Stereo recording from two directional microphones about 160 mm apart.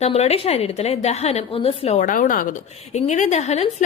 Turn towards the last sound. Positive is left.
turn(degrees=45)  # may be behind; listen again after turning